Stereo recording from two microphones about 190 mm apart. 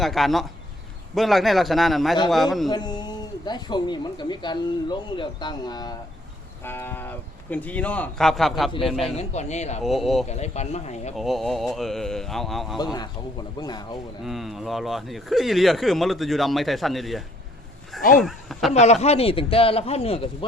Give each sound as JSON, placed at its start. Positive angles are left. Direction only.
{"t": 0.0, "sound": "speech", "side_deg": 0}
{"t": 2.6, "sound": "speech", "side_deg": 20}
{"t": 9.1, "sound": "speech", "side_deg": 35}
{"t": 9.8, "sound": "speech", "side_deg": 0}
{"t": 10.2, "sound": "speech", "side_deg": 35}
{"t": 11.2, "sound": "speech", "side_deg": 0}
{"t": 12.8, "sound": "speech", "side_deg": 20}
{"t": 14.3, "sound": "speech", "side_deg": 0}
{"t": 18.7, "sound": "speech", "side_deg": 35}